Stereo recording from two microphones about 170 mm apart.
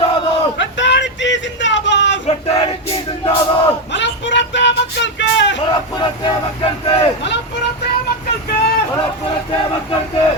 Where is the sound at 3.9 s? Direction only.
90° left.